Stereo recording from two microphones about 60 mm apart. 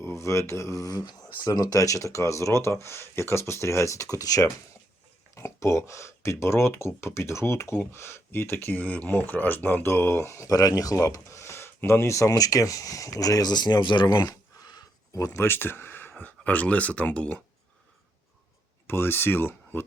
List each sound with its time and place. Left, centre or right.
0.0 s speech: left
1.5 s speech: left
5.3 s speech: left
8.7 s speech: left
9.8 s speech: left
14.1 s a sound: left
15.4 s speech: left
18.9 s speech: left